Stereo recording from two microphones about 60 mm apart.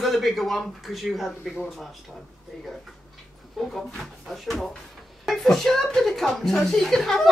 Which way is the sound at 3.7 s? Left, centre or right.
Centre.